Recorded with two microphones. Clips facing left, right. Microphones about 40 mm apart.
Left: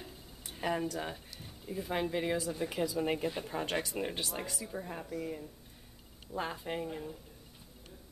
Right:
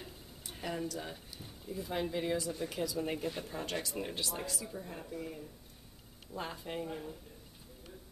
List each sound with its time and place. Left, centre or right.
0.6 s speech: left
3.5 s speech: left
5.2 s speech: centre
6.9 s speech: centre